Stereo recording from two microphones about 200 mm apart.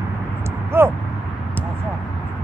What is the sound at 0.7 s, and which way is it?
Vehicle, 10° right (ahead or behind).